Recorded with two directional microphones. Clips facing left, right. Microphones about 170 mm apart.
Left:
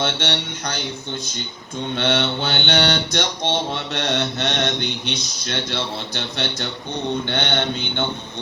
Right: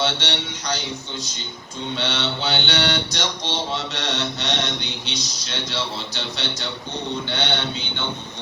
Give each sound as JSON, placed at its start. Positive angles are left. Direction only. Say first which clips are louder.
{"t": 0.0, "sound": "mantra", "louder": "left 1 dB", "side_deg": 55}
{"t": 2.0, "sound": "mantra", "louder": "left 6 dB", "side_deg": 55}